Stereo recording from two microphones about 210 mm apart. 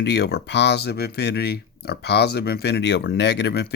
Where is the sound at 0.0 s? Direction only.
55° left (ahead or behind).